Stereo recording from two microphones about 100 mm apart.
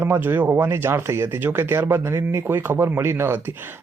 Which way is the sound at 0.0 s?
20° right (ahead or behind).